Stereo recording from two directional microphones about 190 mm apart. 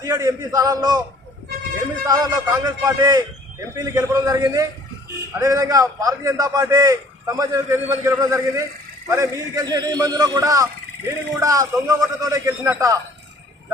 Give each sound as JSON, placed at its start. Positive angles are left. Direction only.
{"t": 0.0, "sound": "a man's voice", "side_deg": -20}
{"t": 2.0, "sound": "a man's voice", "side_deg": -20}